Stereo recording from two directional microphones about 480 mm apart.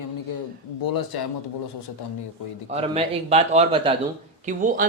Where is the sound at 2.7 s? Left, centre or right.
Centre.